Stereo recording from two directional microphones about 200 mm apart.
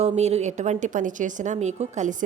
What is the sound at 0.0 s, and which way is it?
A woman's voice, 30° right (ahead or behind).